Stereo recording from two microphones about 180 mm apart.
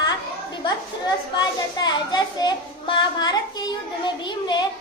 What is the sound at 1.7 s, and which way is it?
A child's voice, 25° left (ahead or behind).